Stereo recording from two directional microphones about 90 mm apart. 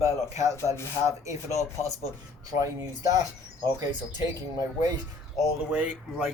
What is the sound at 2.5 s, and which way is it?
Speech, 40° right (ahead or behind).